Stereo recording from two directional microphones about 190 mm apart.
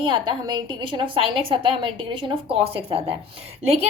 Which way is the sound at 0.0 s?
25° right (ahead or behind).